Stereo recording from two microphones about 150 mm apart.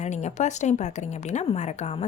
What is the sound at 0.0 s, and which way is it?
A woman's voice, 50° left (ahead or behind).